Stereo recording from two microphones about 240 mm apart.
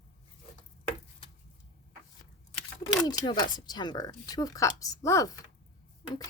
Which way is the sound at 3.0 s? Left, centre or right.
Centre.